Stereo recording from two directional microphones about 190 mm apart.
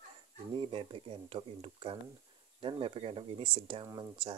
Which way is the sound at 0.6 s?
25° right (ahead or behind).